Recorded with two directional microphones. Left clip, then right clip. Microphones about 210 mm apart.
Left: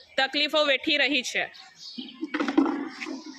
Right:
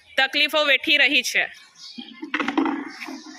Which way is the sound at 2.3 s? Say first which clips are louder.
Right 2 dB; 25° right (ahead or behind).